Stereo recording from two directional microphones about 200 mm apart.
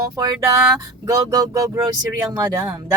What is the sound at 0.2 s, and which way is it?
Speech, 20° right (ahead or behind).